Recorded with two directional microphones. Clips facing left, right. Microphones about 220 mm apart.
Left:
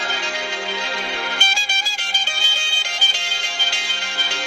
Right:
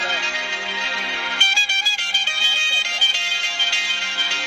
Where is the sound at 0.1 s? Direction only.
45° left (ahead or behind).